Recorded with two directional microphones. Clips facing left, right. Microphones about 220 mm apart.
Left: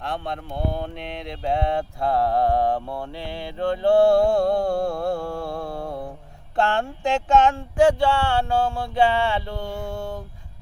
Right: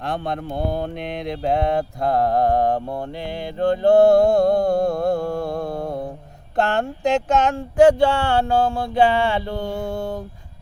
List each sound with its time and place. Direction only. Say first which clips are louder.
0.0 s speech: right 4 dB; 40° right (ahead or behind)
1.1 s mantra: right 4 dB; 45° right (ahead or behind)
3.0 s speech: right 4 dB; 45° right (ahead or behind)